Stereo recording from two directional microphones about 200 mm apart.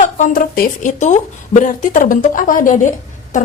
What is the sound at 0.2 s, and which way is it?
Speech, 45° left (ahead or behind).